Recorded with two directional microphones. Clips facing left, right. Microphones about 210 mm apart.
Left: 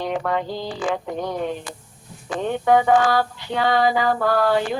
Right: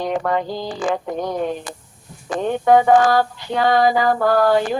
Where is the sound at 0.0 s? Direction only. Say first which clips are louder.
Right 3 dB; 45° right (ahead or behind).